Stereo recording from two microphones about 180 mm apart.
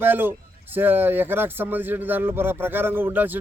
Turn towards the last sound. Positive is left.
turn(degrees=-10)  # may be behind; listen again after turning